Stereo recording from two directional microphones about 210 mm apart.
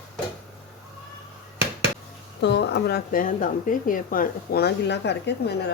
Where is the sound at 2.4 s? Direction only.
55° left (ahead or behind).